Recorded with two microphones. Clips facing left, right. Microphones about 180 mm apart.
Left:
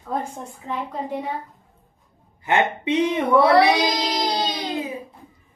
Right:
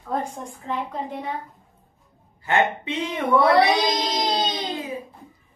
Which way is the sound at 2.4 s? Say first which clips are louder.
Left 1 dB; 15° left (ahead or behind).